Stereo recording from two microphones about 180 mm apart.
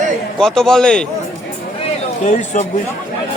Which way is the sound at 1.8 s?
40° left (ahead or behind).